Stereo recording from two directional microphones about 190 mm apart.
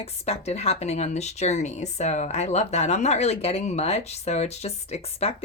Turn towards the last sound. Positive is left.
turn(degrees=35)  # may be behind; listen again after turning